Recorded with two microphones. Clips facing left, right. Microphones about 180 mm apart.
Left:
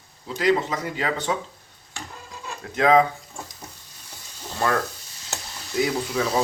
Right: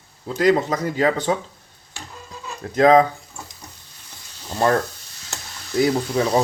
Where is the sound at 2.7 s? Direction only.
40° right (ahead or behind).